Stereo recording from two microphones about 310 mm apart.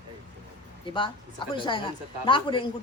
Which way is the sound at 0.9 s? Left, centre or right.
Centre.